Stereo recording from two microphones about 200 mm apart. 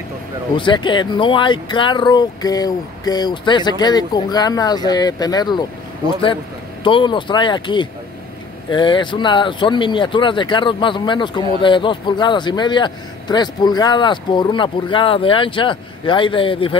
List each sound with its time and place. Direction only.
0.6 s speech: 25° left (ahead or behind)
6.8 s speech: 25° left (ahead or behind)